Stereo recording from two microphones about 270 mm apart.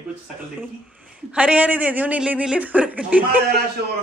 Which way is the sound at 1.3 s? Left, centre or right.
Centre.